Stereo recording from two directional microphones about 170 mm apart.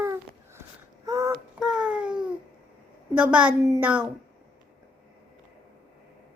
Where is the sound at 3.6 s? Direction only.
20° right (ahead or behind).